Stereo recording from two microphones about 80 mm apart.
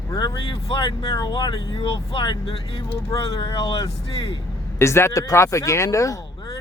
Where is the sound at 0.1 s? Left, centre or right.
Left.